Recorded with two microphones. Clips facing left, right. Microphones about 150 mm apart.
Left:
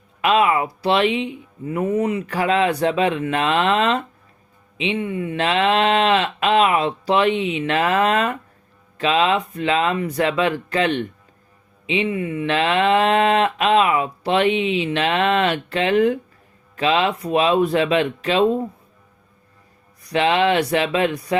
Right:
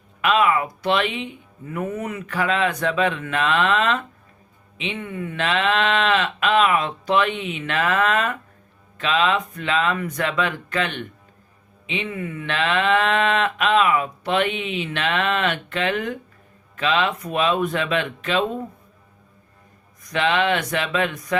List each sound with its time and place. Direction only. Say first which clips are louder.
0.2 s speech: left 2 dB; 35° left (ahead or behind)
5.0 s speech: left 5 dB; 20° left (ahead or behind)
5.4 s speech: left 3 dB; 35° left (ahead or behind)
20.0 s speech: left 3 dB; 35° left (ahead or behind)